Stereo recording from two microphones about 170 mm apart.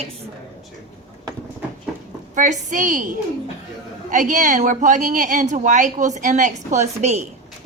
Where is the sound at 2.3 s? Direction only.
45° right (ahead or behind).